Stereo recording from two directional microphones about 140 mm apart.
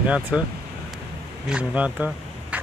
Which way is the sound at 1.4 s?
5° right (ahead or behind).